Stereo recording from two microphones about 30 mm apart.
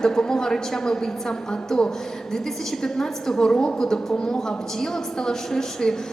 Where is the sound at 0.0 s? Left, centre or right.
Left.